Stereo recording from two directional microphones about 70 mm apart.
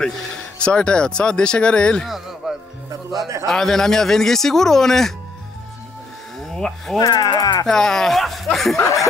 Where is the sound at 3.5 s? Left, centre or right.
Centre.